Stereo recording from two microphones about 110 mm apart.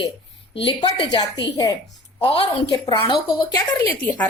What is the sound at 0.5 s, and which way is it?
A woman's voice, 50° left (ahead or behind).